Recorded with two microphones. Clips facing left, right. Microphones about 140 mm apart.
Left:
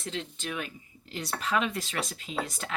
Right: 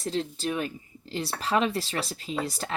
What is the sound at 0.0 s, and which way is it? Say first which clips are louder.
Speech: right 7 dB; 35° right (ahead or behind).